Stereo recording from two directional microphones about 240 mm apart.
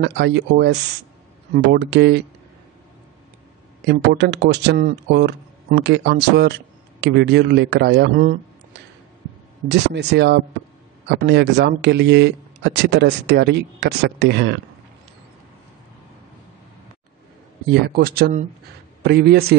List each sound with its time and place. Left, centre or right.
0.0 s speech: right
3.8 s speech: right
9.7 s speech: right
17.8 s speech: right